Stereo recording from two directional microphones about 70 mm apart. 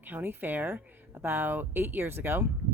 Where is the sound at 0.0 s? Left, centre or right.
Right.